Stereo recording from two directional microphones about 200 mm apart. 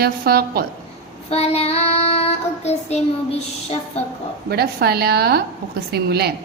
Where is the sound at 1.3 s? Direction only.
30° left (ahead or behind).